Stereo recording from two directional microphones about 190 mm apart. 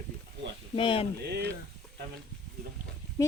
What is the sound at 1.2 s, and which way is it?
Frying, 60° right (ahead or behind).